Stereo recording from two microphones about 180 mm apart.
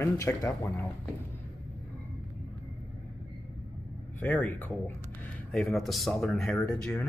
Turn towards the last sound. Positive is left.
turn(degrees=10)  # may be behind; listen again after turning